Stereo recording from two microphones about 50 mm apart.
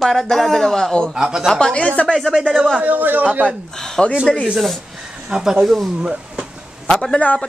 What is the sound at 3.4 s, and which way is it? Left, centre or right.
Speech, centre.